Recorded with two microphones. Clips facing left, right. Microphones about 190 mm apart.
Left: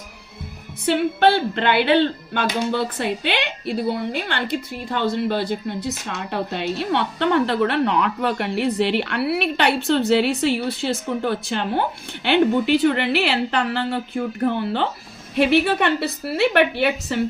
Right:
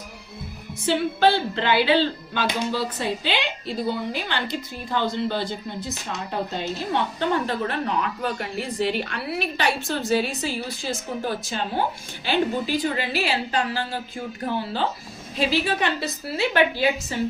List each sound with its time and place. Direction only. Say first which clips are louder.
0.9 s speech: left 3 dB; 60° left (ahead or behind)